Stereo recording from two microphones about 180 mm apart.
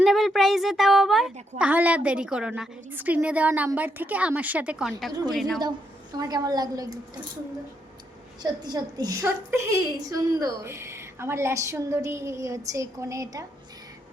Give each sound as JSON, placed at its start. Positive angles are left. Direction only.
{"t": 0.0, "sound": "a woman's voice", "side_deg": 0}
{"t": 5.5, "sound": "a woman's voice", "side_deg": -20}
{"t": 8.4, "sound": "a woman's voice", "side_deg": -20}